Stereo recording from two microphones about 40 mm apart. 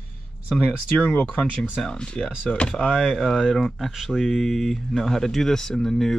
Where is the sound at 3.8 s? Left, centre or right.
Centre.